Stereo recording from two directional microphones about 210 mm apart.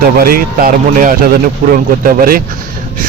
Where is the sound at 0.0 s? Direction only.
45° right (ahead or behind).